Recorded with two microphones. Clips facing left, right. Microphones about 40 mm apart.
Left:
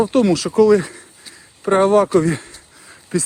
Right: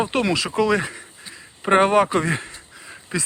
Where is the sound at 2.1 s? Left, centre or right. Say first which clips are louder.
Left 6 dB; right.